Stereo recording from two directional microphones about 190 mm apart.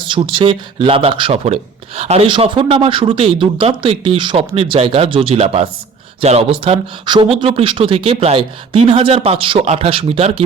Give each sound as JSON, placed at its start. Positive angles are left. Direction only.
{"t": 0.0, "sound": "speech", "side_deg": -25}